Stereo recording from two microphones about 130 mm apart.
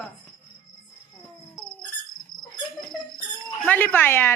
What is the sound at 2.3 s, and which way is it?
Cricket, 90° left.